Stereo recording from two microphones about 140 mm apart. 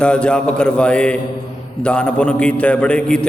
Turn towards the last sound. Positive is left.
turn(degrees=5)  # may be behind; listen again after turning